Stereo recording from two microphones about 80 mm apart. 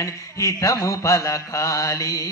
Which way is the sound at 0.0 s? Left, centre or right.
Left.